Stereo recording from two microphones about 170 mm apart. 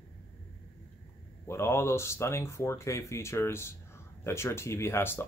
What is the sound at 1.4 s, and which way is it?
Speech, 15° left (ahead or behind).